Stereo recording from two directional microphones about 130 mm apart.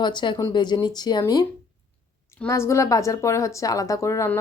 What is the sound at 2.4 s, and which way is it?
A woman's voice, 20° left (ahead or behind).